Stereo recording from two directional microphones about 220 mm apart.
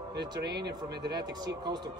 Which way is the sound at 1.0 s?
20° right (ahead or behind).